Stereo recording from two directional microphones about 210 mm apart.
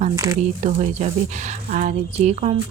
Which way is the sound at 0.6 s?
30° right (ahead or behind).